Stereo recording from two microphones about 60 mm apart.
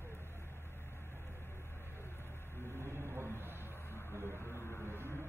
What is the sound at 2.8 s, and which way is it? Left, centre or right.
Vehicle, right.